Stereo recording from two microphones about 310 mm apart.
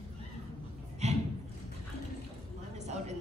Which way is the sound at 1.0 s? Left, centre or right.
Right.